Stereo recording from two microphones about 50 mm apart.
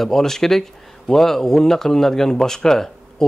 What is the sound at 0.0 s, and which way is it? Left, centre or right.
A man's voice, centre.